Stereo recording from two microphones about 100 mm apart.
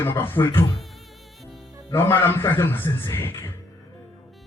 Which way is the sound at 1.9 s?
25° left (ahead or behind).